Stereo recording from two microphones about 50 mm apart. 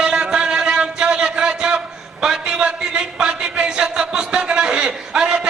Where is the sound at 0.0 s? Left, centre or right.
Centre.